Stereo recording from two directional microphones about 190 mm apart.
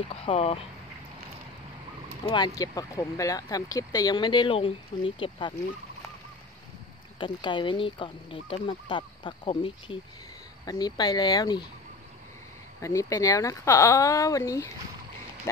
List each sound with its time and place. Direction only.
0.1 s speech: 30° left (ahead or behind)
2.2 s speech: 20° left (ahead or behind)
7.2 s speech: 25° left (ahead or behind)
12.8 s speech: 20° left (ahead or behind)